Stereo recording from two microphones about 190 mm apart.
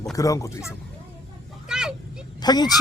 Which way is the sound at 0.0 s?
20° left (ahead or behind).